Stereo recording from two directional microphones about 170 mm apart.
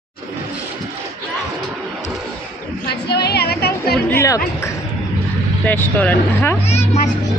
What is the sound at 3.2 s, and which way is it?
Music, 70° left (ahead or behind).